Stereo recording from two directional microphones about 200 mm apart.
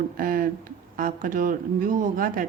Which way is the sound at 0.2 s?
45° right (ahead or behind).